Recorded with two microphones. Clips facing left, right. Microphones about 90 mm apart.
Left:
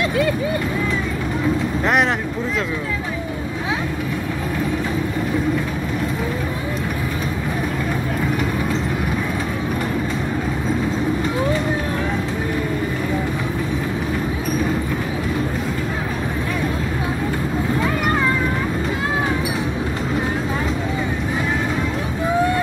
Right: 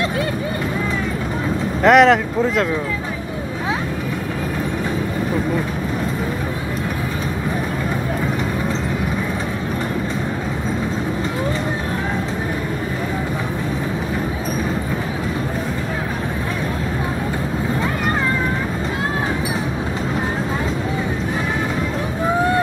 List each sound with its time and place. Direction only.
1.9 s speech: 90° right